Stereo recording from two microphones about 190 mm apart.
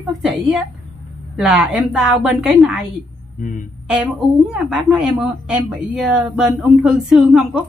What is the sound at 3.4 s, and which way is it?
Speech, 45° left (ahead or behind).